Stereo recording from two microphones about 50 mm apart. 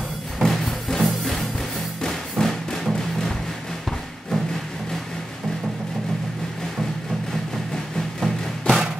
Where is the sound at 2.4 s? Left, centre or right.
Centre.